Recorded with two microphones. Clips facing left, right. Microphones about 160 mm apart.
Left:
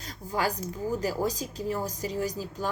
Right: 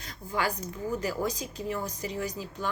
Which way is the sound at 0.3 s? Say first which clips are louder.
Left 2 dB; 40° left (ahead or behind).